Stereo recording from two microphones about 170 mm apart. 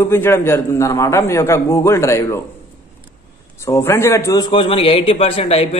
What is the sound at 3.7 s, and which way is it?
A man's voice, 15° left (ahead or behind).